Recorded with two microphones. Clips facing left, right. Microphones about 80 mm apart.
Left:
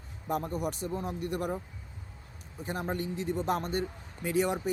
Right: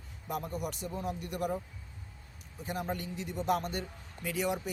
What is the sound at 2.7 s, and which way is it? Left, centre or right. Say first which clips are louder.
A man's voice: left 3 dB; left.